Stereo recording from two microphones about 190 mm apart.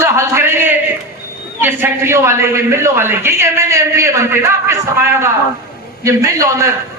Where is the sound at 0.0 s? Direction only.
15° right (ahead or behind).